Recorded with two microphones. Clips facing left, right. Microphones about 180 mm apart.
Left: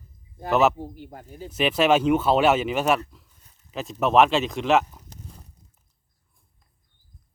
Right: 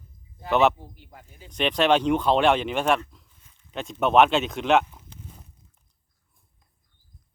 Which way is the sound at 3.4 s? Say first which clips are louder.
Even; 40° left (ahead or behind).